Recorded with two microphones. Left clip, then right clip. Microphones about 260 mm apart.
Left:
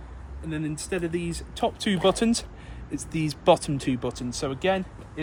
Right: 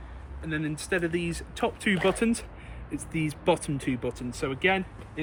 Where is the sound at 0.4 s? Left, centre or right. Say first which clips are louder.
Even; centre.